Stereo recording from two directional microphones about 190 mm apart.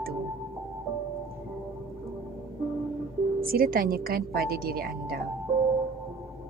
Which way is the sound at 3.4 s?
50° right (ahead or behind).